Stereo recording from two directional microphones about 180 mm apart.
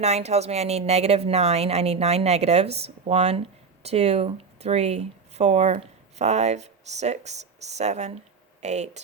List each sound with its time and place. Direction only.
0.0 s speech: 35° right (ahead or behind)